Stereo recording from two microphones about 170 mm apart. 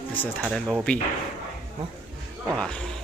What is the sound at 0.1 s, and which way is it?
Speech, 5° left (ahead or behind).